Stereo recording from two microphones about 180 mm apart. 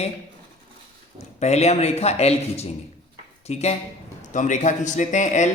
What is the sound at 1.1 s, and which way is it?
A man's voice, 35° left (ahead or behind).